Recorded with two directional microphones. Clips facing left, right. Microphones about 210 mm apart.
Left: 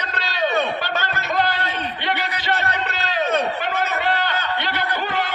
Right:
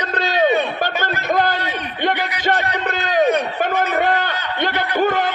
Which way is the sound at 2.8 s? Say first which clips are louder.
Right 7 dB; 50° right (ahead or behind).